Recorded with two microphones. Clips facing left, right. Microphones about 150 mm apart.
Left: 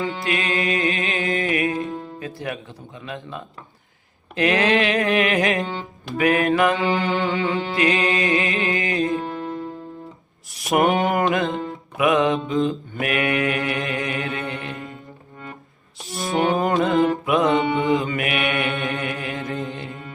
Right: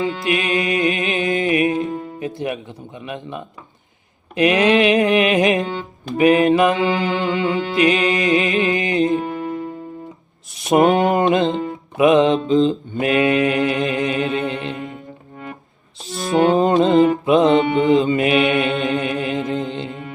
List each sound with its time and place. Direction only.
0.3 s music: 20° right (ahead or behind)
4.4 s mantra: 20° right (ahead or behind)
10.5 s mantra: 20° right (ahead or behind)
16.1 s music: centre (ahead or behind)
16.6 s music: 25° right (ahead or behind)
17.2 s mantra: 25° right (ahead or behind)